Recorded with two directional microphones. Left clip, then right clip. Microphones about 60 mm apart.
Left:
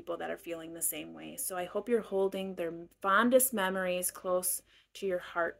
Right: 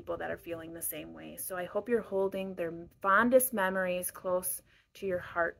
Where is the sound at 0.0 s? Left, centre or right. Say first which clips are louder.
Right 1 dB; left.